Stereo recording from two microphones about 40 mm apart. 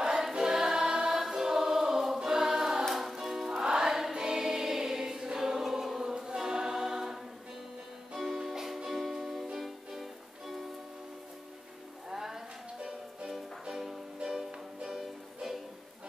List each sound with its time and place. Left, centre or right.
0.3 s choir: centre
2.9 s music: centre
3.6 s choir: centre
8.2 s music: centre
12.1 s music: centre